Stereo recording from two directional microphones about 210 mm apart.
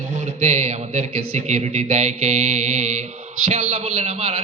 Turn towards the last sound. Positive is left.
turn(degrees=-35)  # may be behind; listen again after turning